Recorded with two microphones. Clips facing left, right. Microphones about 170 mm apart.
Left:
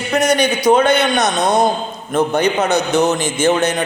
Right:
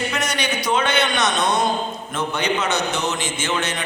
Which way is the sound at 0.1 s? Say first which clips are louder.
Left 9 dB; 40° left (ahead or behind).